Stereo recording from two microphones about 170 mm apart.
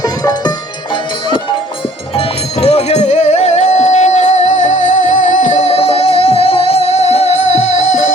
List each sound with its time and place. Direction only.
0.0 s music: 20° left (ahead or behind)
2.1 s music: 40° left (ahead or behind)